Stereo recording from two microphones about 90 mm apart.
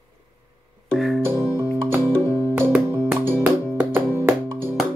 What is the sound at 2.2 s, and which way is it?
Music, 35° left (ahead or behind).